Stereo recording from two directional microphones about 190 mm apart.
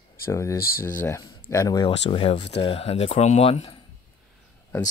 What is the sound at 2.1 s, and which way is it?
Speech, 30° left (ahead or behind).